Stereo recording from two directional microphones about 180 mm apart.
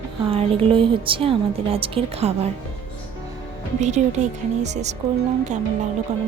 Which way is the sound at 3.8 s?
40° right (ahead or behind).